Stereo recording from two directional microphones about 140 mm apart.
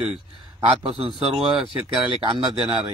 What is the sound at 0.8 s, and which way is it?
Speech, 40° right (ahead or behind).